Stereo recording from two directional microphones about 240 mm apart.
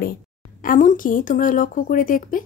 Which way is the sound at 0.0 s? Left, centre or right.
Left.